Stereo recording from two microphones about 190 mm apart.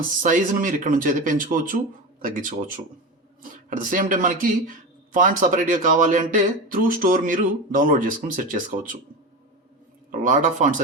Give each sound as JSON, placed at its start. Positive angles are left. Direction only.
{"t": 0.2, "sound": "speech", "side_deg": -45}
{"t": 10.1, "sound": "speech", "side_deg": -40}